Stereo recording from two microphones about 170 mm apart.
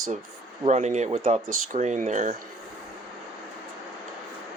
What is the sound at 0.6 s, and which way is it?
Speech, 40° right (ahead or behind).